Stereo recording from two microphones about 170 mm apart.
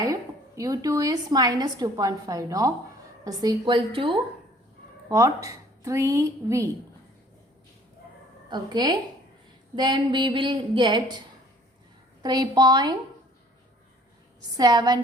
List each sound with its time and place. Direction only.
0.0 s a woman's voice: 20° right (ahead or behind)
5.0 s a woman's voice: 20° right (ahead or behind)
8.4 s a woman's voice: 25° right (ahead or behind)
12.2 s a woman's voice: 25° right (ahead or behind)
14.5 s a woman's voice: 20° right (ahead or behind)